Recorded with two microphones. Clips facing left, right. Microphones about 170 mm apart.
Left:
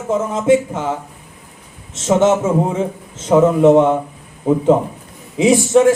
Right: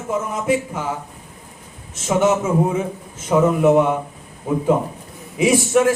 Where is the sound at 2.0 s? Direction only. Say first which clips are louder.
Left 4 dB; 25° left (ahead or behind).